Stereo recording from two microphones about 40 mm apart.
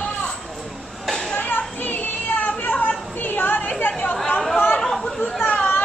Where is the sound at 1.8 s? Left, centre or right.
Left.